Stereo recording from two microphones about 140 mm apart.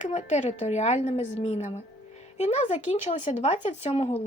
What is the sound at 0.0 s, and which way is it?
Speech, 55° left (ahead or behind).